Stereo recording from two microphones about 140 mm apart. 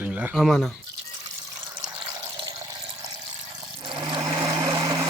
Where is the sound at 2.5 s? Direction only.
25° right (ahead or behind).